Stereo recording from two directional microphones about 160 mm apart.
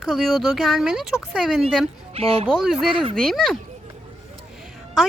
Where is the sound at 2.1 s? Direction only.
40° right (ahead or behind).